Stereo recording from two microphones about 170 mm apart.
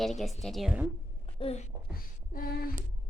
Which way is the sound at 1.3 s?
35° left (ahead or behind).